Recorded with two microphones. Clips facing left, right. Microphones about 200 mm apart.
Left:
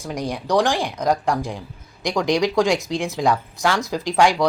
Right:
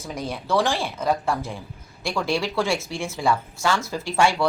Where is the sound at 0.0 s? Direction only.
15° left (ahead or behind).